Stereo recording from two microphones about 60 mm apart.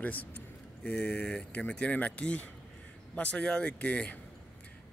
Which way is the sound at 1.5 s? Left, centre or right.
Left.